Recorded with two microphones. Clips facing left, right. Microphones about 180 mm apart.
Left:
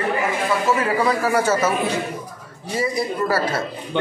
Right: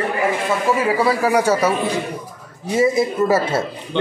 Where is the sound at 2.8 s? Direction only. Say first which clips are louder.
Right 6 dB; 25° right (ahead or behind).